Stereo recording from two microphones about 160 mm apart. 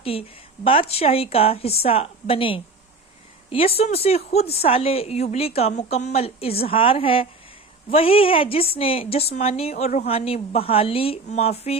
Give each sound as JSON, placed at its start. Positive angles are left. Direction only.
{"t": 0.0, "sound": "speech", "side_deg": 35}